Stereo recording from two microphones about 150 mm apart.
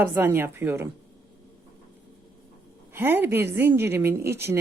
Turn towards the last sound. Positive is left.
turn(degrees=-15)  # may be behind; listen again after turning